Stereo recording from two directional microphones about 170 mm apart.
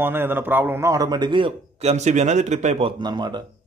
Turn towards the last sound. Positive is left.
turn(degrees=-25)  # may be behind; listen again after turning